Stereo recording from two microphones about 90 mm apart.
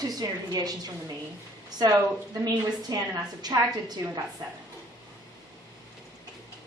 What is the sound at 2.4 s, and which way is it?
A woman's voice, 45° right (ahead or behind).